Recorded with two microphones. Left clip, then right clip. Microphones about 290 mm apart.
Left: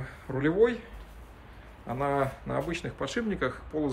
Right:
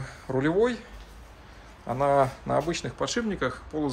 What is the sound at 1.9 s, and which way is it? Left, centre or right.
Speech, centre.